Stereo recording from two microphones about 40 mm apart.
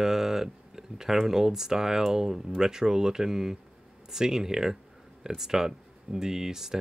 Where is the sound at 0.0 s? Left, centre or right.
Centre.